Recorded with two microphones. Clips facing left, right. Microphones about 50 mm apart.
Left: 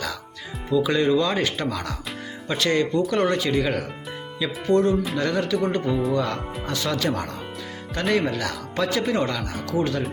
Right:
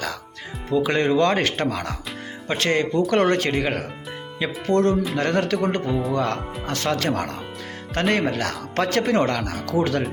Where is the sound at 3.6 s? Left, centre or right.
Right.